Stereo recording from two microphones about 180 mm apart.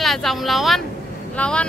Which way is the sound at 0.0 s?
Centre (ahead or behind).